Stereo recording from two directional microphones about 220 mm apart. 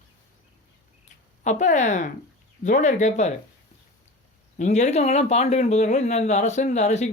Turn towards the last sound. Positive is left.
turn(degrees=30)  # may be behind; listen again after turning